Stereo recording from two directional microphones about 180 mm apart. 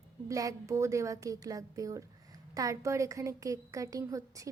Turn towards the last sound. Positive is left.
turn(degrees=-20)  # may be behind; listen again after turning